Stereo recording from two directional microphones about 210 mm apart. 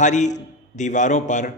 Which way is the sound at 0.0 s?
35° left (ahead or behind).